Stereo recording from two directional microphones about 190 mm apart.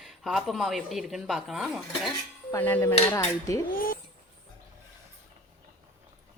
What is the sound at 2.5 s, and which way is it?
Dishes, 10° left (ahead or behind).